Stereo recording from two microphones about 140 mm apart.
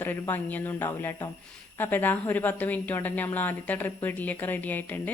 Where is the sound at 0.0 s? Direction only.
15° left (ahead or behind).